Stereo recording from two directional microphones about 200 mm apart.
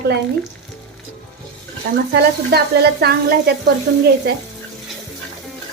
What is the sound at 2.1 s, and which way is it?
Sizzle, 55° right (ahead or behind).